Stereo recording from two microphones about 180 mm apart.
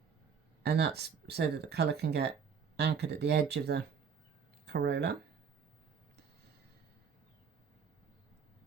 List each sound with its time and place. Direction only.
0.6 s speech: 65° right (ahead or behind)